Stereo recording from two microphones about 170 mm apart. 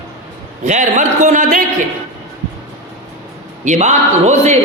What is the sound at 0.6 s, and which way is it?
Speech, 45° right (ahead or behind).